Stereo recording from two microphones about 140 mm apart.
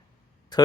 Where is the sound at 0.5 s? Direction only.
30° left (ahead or behind).